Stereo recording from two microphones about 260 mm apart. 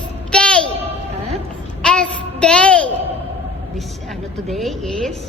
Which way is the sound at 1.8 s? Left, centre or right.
Centre.